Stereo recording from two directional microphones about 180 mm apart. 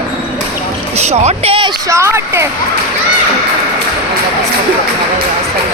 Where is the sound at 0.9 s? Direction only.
35° right (ahead or behind).